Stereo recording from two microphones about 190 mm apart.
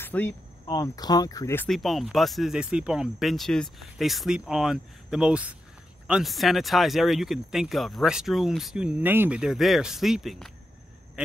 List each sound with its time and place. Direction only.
0.0 s speech: 10° left (ahead or behind)
1.7 s a man's voice: centre (ahead or behind)